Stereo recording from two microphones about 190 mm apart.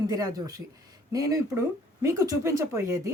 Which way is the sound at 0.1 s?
20° right (ahead or behind).